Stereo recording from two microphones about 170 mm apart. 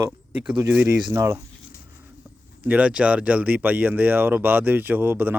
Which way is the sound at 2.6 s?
10° right (ahead or behind).